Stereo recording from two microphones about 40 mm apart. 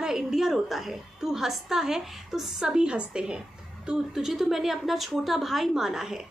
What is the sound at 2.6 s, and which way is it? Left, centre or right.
Speech, right.